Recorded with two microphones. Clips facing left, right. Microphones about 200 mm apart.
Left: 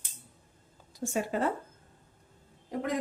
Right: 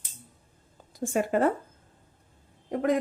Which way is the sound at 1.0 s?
55° right (ahead or behind).